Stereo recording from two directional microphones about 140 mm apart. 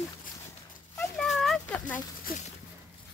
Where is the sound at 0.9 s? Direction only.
5° left (ahead or behind).